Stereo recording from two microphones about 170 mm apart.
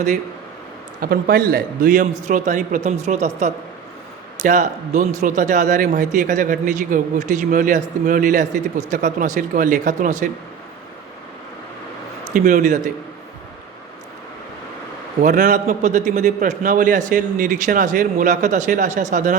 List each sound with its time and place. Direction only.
1.0 s speech: 65° right (ahead or behind); by 10.2 s 45° right (ahead or behind)
12.3 s speech: 50° right (ahead or behind)
15.2 s speech: 50° right (ahead or behind)